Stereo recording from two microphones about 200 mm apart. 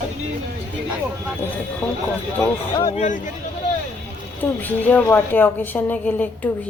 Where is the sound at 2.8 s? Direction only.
40° left (ahead or behind).